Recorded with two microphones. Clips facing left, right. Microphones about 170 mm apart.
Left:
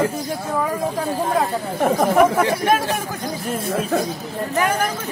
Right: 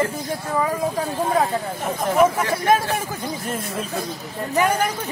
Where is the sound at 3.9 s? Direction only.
60° left (ahead or behind).